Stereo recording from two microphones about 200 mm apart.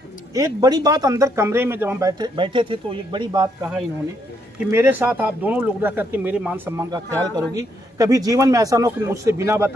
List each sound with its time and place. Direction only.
0.3 s speech: 20° right (ahead or behind)
4.6 s a man's voice: 10° right (ahead or behind)